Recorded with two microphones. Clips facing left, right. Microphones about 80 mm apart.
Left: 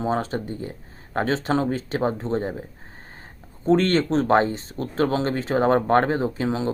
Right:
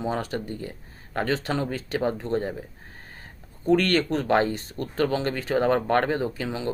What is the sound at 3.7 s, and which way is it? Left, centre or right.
Speech, left.